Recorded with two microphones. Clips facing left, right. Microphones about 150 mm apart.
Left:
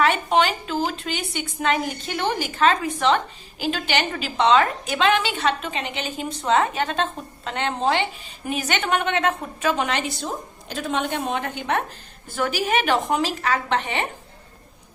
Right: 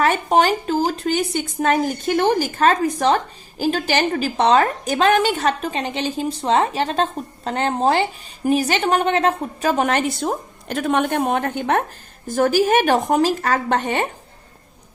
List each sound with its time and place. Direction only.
0.0 s a woman's voice: 40° right (ahead or behind)